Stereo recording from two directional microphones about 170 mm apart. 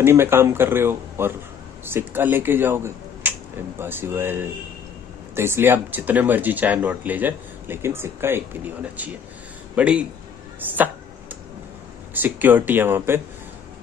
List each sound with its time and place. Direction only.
0.0 s speech: 15° right (ahead or behind)
12.1 s speech: 10° right (ahead or behind)